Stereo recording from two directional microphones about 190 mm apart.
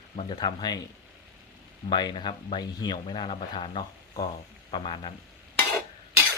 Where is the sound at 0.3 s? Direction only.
20° left (ahead or behind).